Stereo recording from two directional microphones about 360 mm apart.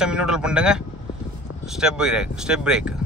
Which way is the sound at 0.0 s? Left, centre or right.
Centre.